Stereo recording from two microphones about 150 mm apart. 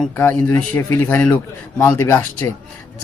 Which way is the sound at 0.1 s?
15° left (ahead or behind).